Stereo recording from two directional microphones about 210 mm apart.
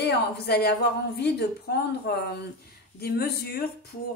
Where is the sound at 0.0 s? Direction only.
50° left (ahead or behind).